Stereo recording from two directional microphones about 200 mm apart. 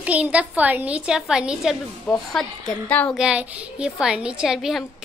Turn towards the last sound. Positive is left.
turn(degrees=0)  # may be behind; listen again after turning